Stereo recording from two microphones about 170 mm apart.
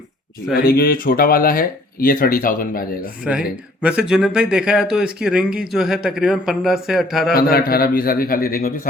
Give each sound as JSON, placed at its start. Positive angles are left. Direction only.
{"t": 0.5, "sound": "speech", "side_deg": 60}
{"t": 3.3, "sound": "speech", "side_deg": -5}
{"t": 7.3, "sound": "speech", "side_deg": 60}